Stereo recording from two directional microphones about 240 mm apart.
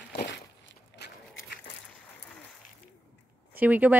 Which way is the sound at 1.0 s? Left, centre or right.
Left.